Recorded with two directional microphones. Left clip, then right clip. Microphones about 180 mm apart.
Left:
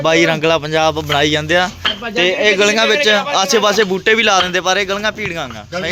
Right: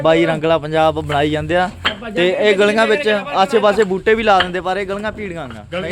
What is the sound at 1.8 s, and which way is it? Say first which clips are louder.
Speech: left 2 dB; 30° right (ahead or behind).